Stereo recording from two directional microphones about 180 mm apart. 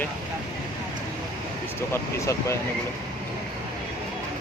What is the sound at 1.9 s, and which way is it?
Speech, 15° left (ahead or behind).